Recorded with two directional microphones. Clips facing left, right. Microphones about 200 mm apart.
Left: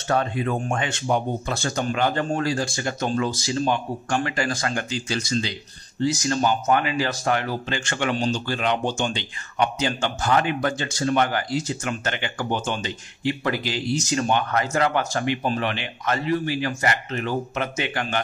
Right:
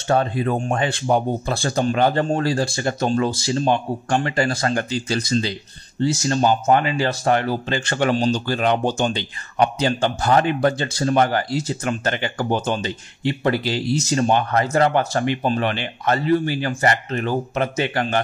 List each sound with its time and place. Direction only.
0.1 s a man's voice: 35° right (ahead or behind)